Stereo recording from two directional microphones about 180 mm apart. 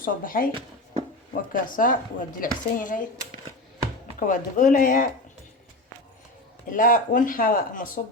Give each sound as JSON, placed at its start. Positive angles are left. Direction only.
{"t": 0.0, "sound": "speech", "side_deg": 50}
{"t": 4.2, "sound": "speech", "side_deg": 45}
{"t": 6.7, "sound": "speech", "side_deg": 50}